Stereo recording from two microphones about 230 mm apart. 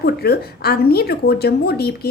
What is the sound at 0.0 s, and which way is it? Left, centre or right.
A woman's voice, left.